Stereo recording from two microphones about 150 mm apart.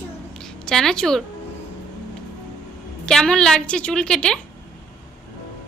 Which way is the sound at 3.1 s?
5° left (ahead or behind).